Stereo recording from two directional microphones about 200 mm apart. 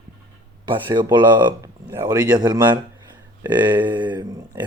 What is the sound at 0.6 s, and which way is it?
Speech, 20° right (ahead or behind).